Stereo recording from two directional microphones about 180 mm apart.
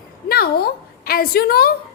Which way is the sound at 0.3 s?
55° left (ahead or behind).